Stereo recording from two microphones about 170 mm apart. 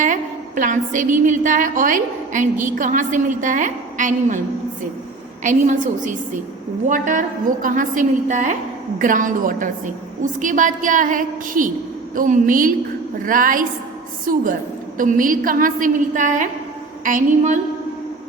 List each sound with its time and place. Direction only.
0.0 s a woman's voice: 50° right (ahead or behind)
5.4 s a woman's voice: 50° right (ahead or behind)